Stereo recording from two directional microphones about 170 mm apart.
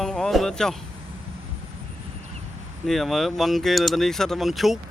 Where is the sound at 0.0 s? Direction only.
5° left (ahead or behind).